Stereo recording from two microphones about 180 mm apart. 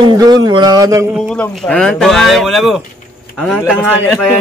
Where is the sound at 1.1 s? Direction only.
5° right (ahead or behind).